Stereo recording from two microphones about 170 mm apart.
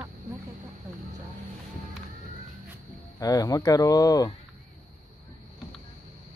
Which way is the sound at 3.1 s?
20° left (ahead or behind).